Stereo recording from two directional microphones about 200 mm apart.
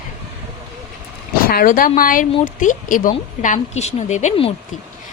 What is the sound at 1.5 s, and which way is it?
A woman's voice, 45° left (ahead or behind).